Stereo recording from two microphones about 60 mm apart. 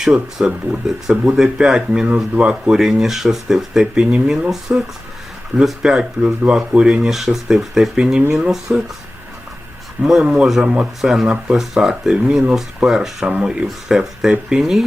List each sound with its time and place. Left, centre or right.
0.0 s speech: centre
10.2 s speech: centre